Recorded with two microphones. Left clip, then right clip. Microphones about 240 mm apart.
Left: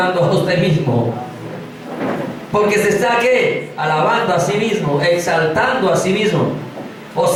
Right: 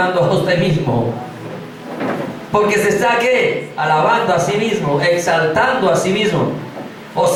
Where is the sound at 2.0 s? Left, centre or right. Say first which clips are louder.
Even; centre.